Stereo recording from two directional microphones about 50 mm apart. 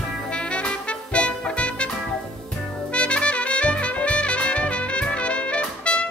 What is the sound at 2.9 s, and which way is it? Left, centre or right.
Trumpet, left.